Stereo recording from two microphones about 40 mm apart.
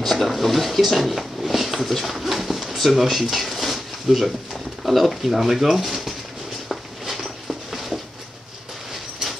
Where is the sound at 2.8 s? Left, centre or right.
Centre.